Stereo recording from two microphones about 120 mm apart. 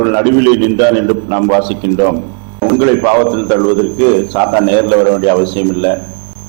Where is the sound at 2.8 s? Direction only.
20° right (ahead or behind).